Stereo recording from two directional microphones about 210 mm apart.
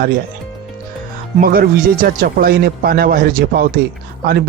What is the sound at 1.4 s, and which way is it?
A man's voice, 45° right (ahead or behind).